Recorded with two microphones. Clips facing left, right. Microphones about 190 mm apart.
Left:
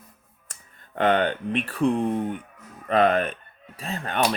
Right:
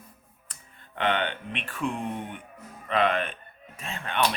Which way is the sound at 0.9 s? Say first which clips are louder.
Left 6 dB; 40° left (ahead or behind).